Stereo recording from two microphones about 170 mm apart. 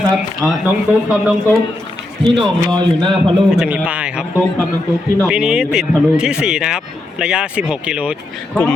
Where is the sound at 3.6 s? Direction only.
5° right (ahead or behind).